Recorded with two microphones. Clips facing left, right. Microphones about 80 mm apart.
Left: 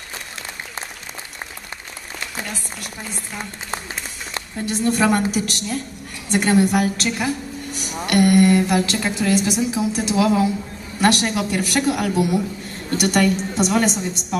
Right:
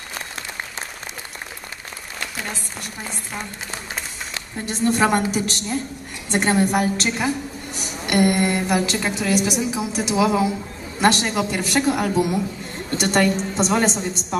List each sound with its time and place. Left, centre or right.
4.6 s a woman's voice: right